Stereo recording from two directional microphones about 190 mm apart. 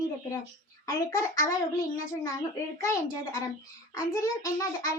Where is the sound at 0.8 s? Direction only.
15° left (ahead or behind).